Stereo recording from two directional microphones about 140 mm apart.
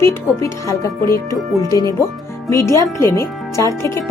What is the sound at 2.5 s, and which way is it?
Speech, 20° left (ahead or behind).